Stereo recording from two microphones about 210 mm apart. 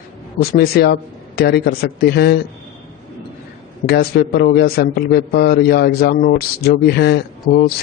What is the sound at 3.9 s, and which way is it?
A man's voice, 50° left (ahead or behind).